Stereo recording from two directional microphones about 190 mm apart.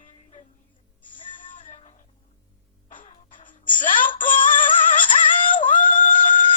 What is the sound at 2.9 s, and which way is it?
Music, 45° left (ahead or behind).